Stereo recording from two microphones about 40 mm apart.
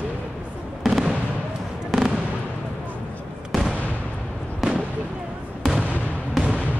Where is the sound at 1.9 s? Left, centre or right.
Centre.